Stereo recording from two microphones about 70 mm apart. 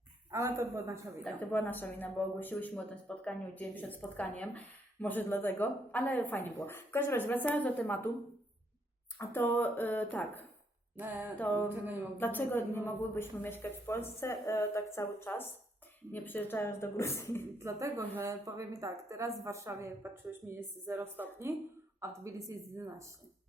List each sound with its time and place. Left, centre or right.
0.3 s a woman's voice: right
1.4 s speech: left
9.1 s speech: left
11.7 s a woman's voice: right
12.1 s a woman's voice: left
17.6 s a woman's voice: right
20.5 s a woman's voice: right
22.2 s a woman's voice: right